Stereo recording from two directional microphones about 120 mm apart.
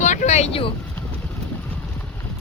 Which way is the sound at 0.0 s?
85° left.